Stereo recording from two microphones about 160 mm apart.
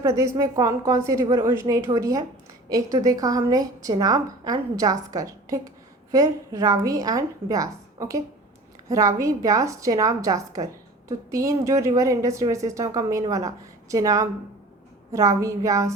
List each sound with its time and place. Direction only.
0.0 s a woman's voice: 20° right (ahead or behind)